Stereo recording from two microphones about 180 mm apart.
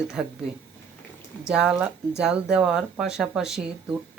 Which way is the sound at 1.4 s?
5° right (ahead or behind).